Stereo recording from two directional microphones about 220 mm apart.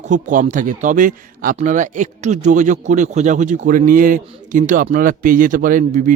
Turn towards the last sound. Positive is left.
turn(degrees=-40)  # may be behind; listen again after turning